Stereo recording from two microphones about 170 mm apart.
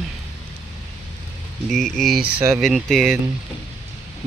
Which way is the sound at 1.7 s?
Centre (ahead or behind).